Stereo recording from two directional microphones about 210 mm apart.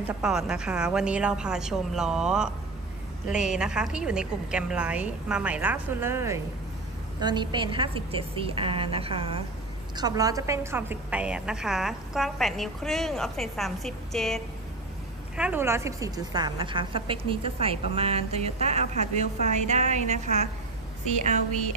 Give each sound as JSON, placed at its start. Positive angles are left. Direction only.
{"t": 0.2, "sound": "a woman's voice", "side_deg": -5}